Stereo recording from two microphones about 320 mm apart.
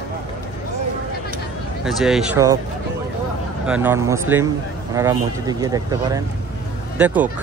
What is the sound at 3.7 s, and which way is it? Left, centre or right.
Speech, centre.